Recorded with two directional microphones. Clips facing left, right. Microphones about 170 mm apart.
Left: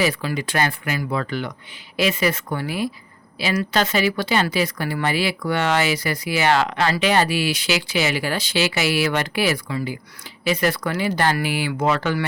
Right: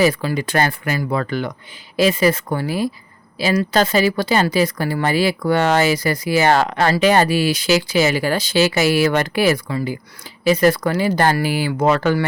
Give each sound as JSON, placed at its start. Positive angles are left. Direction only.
{"t": 0.0, "sound": "speech", "side_deg": -40}